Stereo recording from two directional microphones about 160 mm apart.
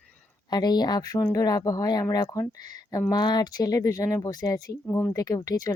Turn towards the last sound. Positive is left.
turn(degrees=20)  # may be behind; listen again after turning